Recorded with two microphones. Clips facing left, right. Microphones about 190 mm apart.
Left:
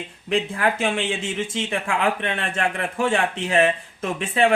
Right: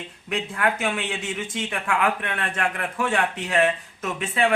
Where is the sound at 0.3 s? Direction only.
30° left (ahead or behind).